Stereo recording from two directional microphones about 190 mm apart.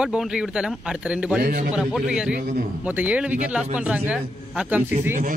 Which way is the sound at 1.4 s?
45° right (ahead or behind).